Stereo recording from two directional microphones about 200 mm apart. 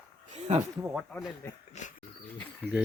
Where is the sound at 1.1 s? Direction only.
10° left (ahead or behind).